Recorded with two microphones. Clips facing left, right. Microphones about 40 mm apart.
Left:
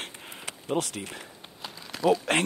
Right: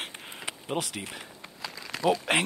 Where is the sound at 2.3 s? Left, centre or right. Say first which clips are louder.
Even; centre.